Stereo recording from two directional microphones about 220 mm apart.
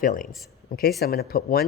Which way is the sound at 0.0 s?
40° left (ahead or behind).